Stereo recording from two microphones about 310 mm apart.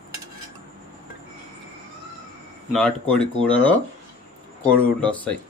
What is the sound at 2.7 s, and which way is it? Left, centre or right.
Speech, centre.